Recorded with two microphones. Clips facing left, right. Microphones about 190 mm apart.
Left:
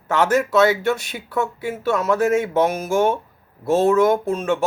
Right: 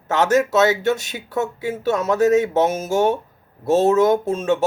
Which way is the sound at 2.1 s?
40° right (ahead or behind).